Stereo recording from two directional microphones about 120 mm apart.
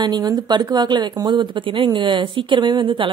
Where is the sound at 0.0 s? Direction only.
35° right (ahead or behind).